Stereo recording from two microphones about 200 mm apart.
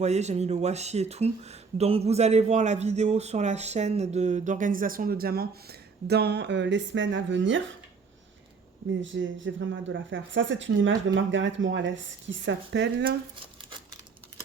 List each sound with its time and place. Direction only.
0.0 s speech: 35° right (ahead or behind); by 7.6 s 65° right (ahead or behind)
9.0 s speech: 70° right (ahead or behind)